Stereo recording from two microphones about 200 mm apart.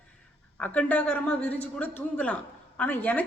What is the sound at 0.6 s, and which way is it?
A woman's voice, 5° left (ahead or behind).